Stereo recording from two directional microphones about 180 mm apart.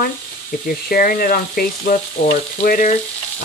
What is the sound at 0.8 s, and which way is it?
Sizzle, 55° left (ahead or behind).